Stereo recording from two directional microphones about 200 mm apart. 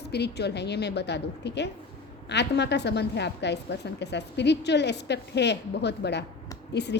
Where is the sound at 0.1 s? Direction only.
55° left (ahead or behind).